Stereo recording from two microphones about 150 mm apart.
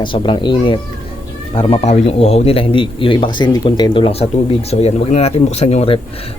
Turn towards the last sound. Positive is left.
turn(degrees=40)  # may be behind; listen again after turning